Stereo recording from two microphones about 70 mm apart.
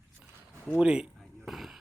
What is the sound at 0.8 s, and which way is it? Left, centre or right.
Speech, centre.